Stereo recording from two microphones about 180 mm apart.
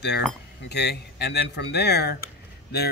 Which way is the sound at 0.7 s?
65° left (ahead or behind).